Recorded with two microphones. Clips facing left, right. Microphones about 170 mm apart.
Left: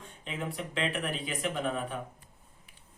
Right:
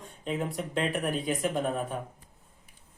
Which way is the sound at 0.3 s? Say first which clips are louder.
Right 5 dB; 45° right (ahead or behind).